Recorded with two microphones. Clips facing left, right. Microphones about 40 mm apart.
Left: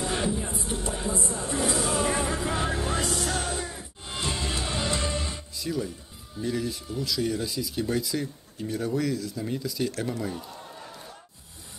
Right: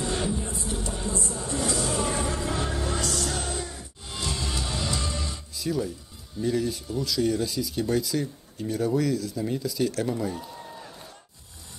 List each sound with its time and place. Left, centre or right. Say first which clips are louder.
0.0 s music: even; centre
5.6 s speech: right 3 dB; centre